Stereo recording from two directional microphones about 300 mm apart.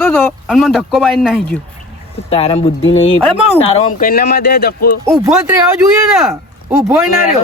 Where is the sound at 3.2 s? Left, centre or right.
Centre.